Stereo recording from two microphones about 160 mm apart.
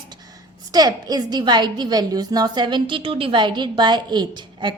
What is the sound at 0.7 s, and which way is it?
A woman's voice, 25° right (ahead or behind).